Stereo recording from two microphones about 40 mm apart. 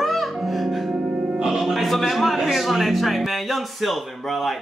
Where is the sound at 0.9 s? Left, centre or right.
Centre.